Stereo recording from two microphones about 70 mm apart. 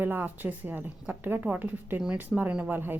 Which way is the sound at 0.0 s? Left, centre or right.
Right.